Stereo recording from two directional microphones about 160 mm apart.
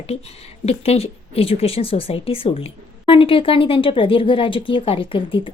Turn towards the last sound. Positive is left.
turn(degrees=30)  # may be behind; listen again after turning